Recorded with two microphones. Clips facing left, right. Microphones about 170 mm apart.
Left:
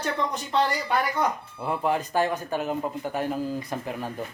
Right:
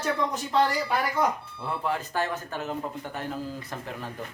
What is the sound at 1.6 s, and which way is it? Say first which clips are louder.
Speech: left 4 dB; 15° left (ahead or behind).